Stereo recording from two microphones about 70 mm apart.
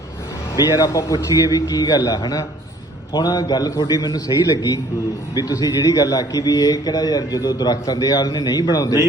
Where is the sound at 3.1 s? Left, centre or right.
Left.